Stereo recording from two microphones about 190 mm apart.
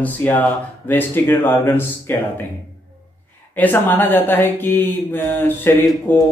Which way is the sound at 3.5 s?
10° left (ahead or behind).